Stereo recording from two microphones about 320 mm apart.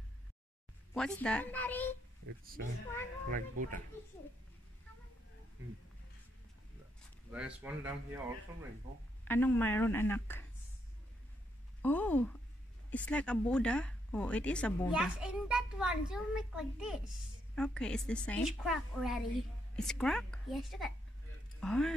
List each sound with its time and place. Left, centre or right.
0.9 s a child's voice: centre
2.2 s speech: right
7.2 s a child's voice: centre
9.2 s a woman's voice: centre
11.8 s a child's voice: centre